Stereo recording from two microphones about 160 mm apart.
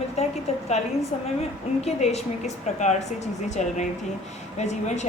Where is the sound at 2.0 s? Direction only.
40° left (ahead or behind).